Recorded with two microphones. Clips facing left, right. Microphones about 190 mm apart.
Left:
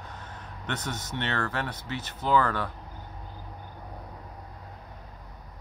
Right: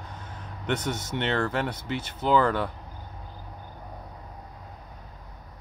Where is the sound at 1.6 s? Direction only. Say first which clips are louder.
Right 4 dB; 10° right (ahead or behind).